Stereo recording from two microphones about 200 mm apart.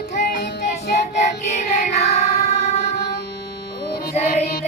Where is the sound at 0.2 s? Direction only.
45° left (ahead or behind).